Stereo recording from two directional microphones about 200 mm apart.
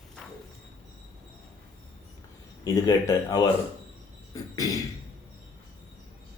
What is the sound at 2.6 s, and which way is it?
Speech, 20° left (ahead or behind).